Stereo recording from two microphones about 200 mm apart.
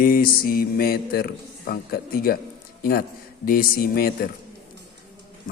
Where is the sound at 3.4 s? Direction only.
45° left (ahead or behind).